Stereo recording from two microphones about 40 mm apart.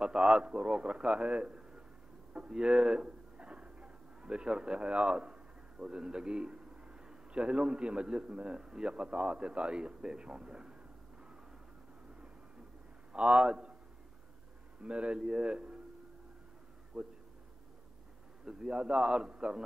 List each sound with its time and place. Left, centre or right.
0.0 s a man's voice: right
13.1 s a man's voice: right
14.8 s a man's voice: right
16.9 s speech: centre
18.4 s a man's voice: right